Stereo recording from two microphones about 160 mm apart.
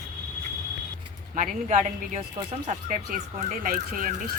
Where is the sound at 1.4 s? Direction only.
50° right (ahead or behind).